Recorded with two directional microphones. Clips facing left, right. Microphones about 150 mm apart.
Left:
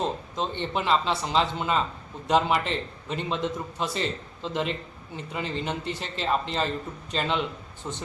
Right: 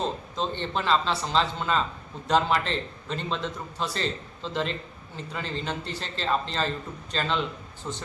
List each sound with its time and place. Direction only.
0.0 s speech: 15° left (ahead or behind)